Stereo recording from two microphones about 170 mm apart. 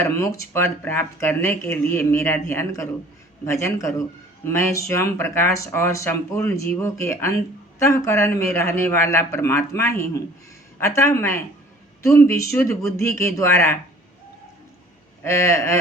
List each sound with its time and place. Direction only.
0.0 s speech: 20° left (ahead or behind)
15.2 s speech: 15° left (ahead or behind)